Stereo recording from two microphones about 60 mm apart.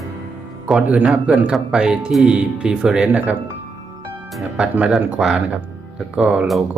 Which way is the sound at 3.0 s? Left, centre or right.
Right.